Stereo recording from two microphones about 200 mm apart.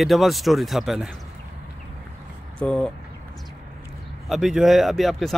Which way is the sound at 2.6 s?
5° left (ahead or behind).